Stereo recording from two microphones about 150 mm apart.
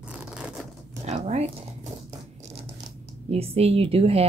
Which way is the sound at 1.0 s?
45° right (ahead or behind).